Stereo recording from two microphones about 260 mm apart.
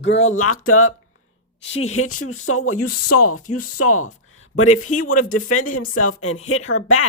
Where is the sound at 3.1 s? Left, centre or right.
Left.